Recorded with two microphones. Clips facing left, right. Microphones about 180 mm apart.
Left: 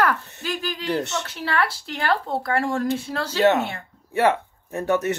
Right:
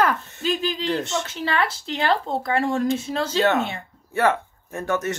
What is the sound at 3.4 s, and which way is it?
Speech, 20° left (ahead or behind).